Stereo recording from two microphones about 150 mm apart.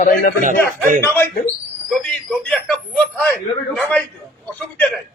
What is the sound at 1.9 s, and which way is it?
A man's voice, 5° left (ahead or behind).